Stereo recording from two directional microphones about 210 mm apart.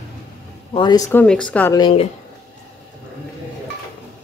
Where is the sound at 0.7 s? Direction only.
20° left (ahead or behind).